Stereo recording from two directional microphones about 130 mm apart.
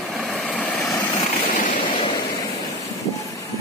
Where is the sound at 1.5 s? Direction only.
90° left.